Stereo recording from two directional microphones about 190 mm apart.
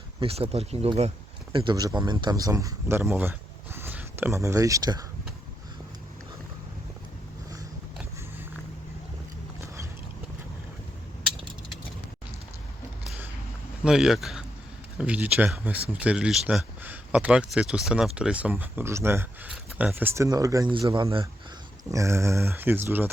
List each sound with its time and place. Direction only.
0.2 s speech: 30° right (ahead or behind)
1.5 s speech: 20° right (ahead or behind)
13.8 s speech: 5° right (ahead or behind); by 21.2 s 25° right (ahead or behind)
21.9 s speech: 15° right (ahead or behind)